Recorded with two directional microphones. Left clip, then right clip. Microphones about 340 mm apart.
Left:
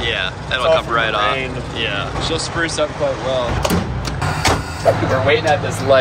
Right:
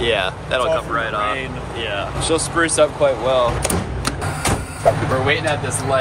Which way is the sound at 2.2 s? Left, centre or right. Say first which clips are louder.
Right 4 dB; centre.